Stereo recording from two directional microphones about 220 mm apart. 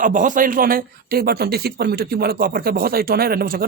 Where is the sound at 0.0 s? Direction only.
35° right (ahead or behind).